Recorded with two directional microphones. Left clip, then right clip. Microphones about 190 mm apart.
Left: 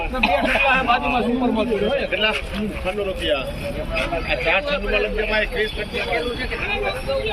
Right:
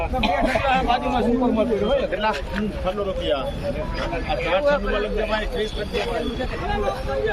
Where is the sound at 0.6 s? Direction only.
20° right (ahead or behind).